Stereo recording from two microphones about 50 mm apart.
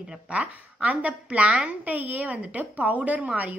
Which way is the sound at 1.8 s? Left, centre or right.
Right.